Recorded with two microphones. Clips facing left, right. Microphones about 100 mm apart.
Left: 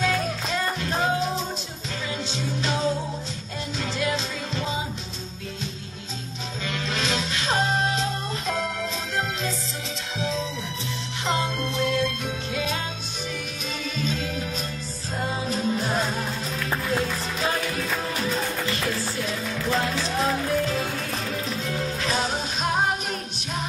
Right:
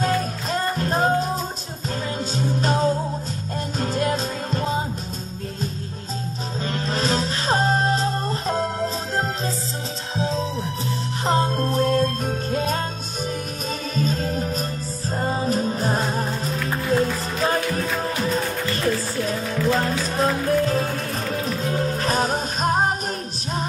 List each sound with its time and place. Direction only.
0.0 s music: 40° right (ahead or behind)
6.6 s music: 40° right (ahead or behind)
13.9 s music: 40° right (ahead or behind)